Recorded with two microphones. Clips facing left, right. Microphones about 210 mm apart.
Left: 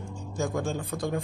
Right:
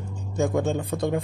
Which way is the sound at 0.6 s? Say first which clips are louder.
Right 6 dB; 25° right (ahead or behind).